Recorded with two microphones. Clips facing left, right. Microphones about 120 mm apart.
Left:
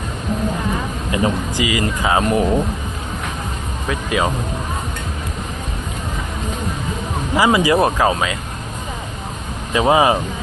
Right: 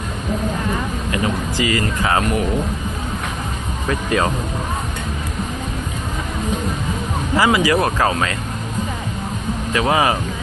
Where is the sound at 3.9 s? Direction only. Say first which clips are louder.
Right 1 dB; 5° left (ahead or behind).